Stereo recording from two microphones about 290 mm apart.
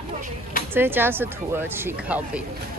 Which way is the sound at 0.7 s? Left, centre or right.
Centre.